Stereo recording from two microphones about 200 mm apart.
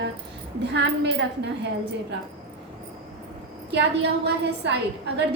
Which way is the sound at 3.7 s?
60° right (ahead or behind).